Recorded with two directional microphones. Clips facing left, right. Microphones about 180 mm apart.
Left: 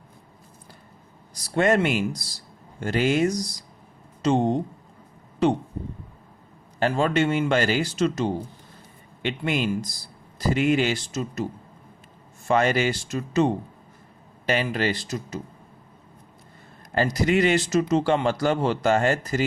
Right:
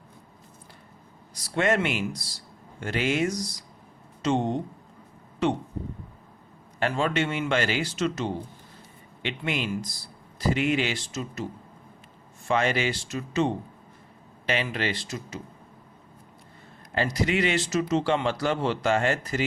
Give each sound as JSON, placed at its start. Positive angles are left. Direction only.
{"t": 1.5, "sound": "speech", "side_deg": 40}
{"t": 6.7, "sound": "speech", "side_deg": 40}
{"t": 12.5, "sound": "speech", "side_deg": 45}
{"t": 16.9, "sound": "speech", "side_deg": 45}